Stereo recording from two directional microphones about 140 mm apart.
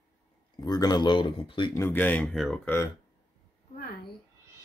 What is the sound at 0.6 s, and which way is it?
Speech, 30° left (ahead or behind).